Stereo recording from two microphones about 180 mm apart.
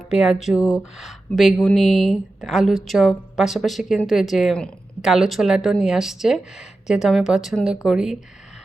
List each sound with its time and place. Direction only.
0.1 s a woman's voice: 5° right (ahead or behind)